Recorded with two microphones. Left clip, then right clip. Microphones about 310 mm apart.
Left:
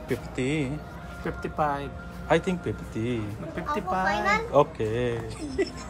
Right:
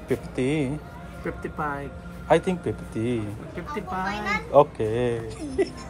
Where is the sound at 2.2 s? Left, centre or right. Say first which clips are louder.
Right 3 dB; centre.